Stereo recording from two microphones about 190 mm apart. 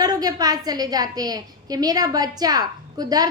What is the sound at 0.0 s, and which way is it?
A woman's voice, 20° right (ahead or behind).